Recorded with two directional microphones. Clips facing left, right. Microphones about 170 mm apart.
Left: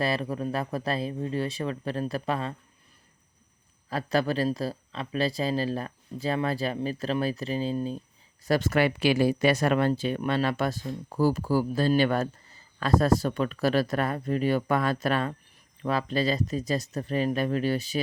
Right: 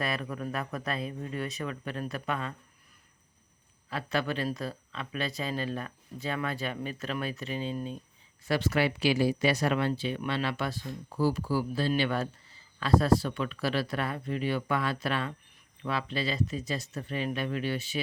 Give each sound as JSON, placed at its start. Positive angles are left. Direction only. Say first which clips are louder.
{"t": 0.0, "sound": "speech", "louder": "left 5 dB", "side_deg": 30}
{"t": 3.8, "sound": "speech", "louder": "left 5 dB", "side_deg": 40}
{"t": 8.4, "sound": "speech", "louder": "left 4 dB", "side_deg": 45}